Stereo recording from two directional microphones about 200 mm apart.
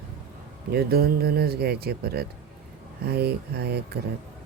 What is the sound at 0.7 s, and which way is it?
Speech, 50° right (ahead or behind).